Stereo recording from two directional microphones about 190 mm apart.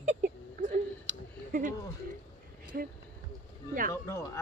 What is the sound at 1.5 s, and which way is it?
Speech, 45° right (ahead or behind).